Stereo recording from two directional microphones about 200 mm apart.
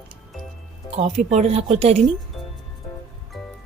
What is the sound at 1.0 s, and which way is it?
Speech, 35° right (ahead or behind).